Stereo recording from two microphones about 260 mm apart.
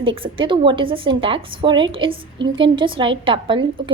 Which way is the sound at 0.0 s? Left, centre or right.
Centre.